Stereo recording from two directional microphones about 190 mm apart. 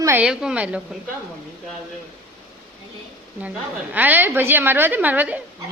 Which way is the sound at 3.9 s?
10° right (ahead or behind).